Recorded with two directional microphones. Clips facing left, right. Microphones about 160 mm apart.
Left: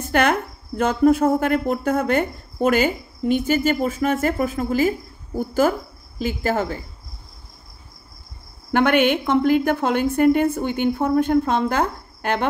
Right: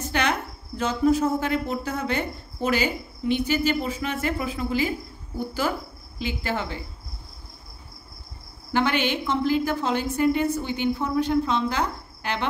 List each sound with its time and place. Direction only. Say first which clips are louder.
0.0 s a woman's voice: left 6 dB; 50° left (ahead or behind)
8.7 s a woman's voice: left 6 dB; 55° left (ahead or behind)